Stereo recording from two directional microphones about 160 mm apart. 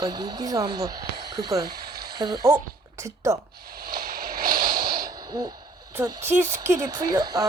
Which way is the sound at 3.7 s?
70° right (ahead or behind).